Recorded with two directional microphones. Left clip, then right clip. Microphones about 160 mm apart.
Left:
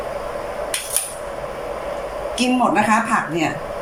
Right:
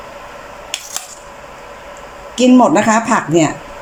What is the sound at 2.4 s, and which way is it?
Speech, 55° right (ahead or behind).